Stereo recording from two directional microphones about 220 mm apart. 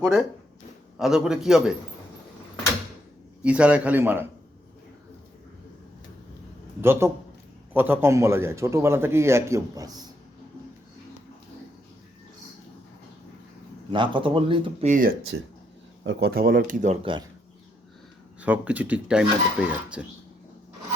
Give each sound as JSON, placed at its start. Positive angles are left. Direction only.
{"t": 0.0, "sound": "speech", "side_deg": 0}
{"t": 3.4, "sound": "speech", "side_deg": -5}
{"t": 6.8, "sound": "speech", "side_deg": -10}
{"t": 13.9, "sound": "speech", "side_deg": -20}
{"t": 18.3, "sound": "speech", "side_deg": -5}